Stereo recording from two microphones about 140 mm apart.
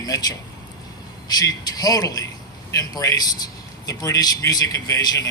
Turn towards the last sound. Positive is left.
turn(degrees=30)  # may be behind; listen again after turning